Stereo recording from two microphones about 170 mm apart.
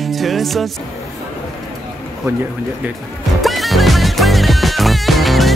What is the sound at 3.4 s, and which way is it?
Music, centre (ahead or behind).